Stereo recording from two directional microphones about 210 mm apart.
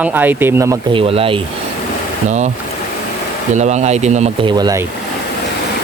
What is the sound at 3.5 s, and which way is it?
Speech, 35° right (ahead or behind).